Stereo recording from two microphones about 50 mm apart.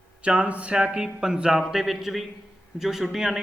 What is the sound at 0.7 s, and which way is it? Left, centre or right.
A man's voice, centre.